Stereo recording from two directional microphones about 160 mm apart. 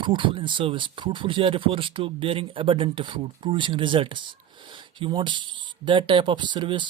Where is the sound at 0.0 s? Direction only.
30° right (ahead or behind).